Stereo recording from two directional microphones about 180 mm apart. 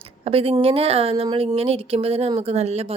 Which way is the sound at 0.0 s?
30° right (ahead or behind).